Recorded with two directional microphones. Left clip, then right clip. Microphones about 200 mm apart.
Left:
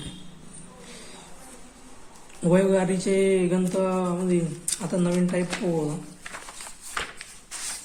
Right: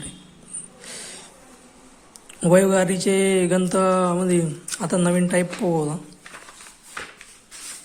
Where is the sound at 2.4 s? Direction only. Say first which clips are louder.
Right 5 dB; 40° right (ahead or behind).